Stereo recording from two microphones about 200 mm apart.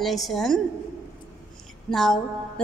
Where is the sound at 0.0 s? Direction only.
Centre (ahead or behind).